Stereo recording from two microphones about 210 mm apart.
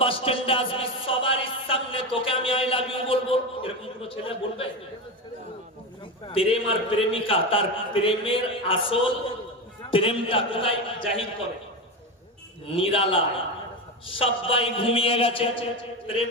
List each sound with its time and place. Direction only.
0.0 s speech: 25° left (ahead or behind)
6.2 s speech: 25° left (ahead or behind)
9.9 s speech: 25° left (ahead or behind)
12.6 s speech: 25° left (ahead or behind)